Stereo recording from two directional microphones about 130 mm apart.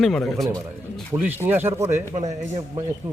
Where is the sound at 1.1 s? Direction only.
15° right (ahead or behind).